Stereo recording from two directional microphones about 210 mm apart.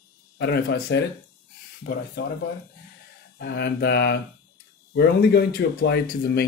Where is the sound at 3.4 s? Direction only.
50° left (ahead or behind).